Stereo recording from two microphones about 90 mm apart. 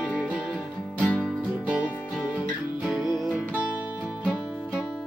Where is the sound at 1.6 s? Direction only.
10° right (ahead or behind).